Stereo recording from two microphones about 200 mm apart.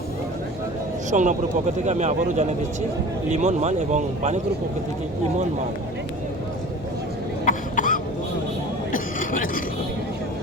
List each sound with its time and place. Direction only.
1.1 s speech: 40° right (ahead or behind)
7.4 s cough: 40° left (ahead or behind)
8.9 s a sound: 40° left (ahead or behind)